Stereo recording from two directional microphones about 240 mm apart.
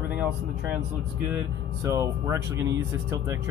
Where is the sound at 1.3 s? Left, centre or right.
Centre.